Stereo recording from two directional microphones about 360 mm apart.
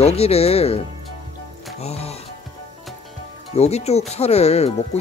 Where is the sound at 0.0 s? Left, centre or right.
Centre.